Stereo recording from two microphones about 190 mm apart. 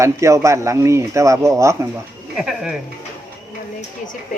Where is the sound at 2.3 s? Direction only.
Centre (ahead or behind).